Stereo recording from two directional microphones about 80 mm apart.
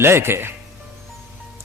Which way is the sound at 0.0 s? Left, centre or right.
Right.